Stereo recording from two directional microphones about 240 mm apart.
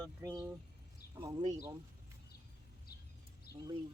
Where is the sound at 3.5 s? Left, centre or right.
Left.